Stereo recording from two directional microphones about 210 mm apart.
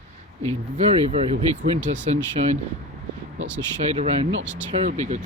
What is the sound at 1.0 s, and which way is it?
Speech, 30° right (ahead or behind).